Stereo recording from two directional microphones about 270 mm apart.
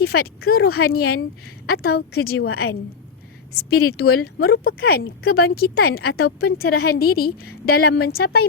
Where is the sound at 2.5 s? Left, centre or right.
Left.